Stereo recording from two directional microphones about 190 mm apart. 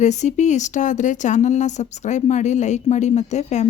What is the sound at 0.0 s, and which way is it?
A woman's voice, 35° left (ahead or behind).